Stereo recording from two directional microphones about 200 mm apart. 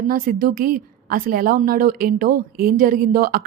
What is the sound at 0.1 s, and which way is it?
A woman's voice, 45° right (ahead or behind).